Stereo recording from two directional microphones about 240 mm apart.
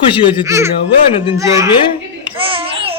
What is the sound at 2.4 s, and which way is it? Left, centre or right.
Babbling, right.